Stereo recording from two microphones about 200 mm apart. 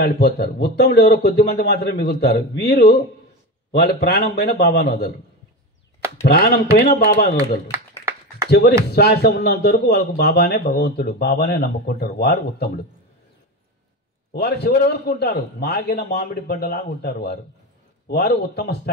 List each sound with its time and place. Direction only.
0.0 s a man's voice: 55° left (ahead or behind)
6.2 s a man's voice: 50° left (ahead or behind)
7.3 s a sound: 15° right (ahead or behind)
8.5 s a man's voice: 50° left (ahead or behind)
14.3 s a man's voice: 50° left (ahead or behind)